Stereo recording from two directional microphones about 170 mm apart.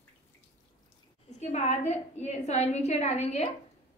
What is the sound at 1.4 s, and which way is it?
A woman's voice, 40° left (ahead or behind).